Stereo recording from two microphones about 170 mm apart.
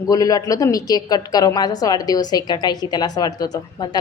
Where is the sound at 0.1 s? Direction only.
20° left (ahead or behind).